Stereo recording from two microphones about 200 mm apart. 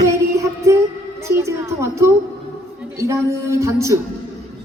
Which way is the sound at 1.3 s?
15° right (ahead or behind).